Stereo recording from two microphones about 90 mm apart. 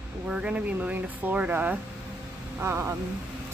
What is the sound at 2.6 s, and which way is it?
Speech, 30° right (ahead or behind).